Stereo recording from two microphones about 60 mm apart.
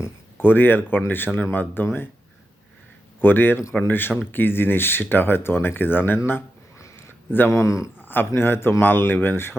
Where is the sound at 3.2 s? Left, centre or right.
Left.